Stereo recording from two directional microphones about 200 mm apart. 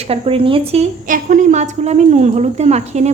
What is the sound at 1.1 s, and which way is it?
A woman's voice, 40° right (ahead or behind).